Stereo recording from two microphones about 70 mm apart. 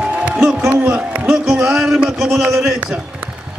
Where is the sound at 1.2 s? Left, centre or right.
Centre.